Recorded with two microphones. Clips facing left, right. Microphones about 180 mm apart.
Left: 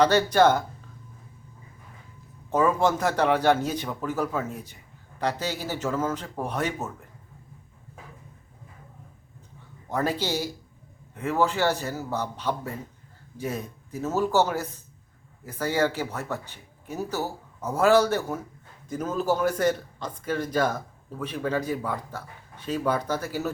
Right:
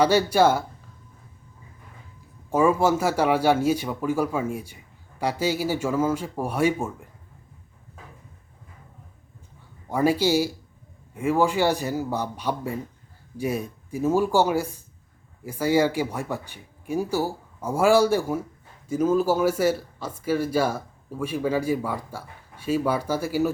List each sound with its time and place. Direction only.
0.0 s speech: 10° right (ahead or behind)
2.5 s speech: 10° right (ahead or behind)
9.9 s speech: 10° right (ahead or behind)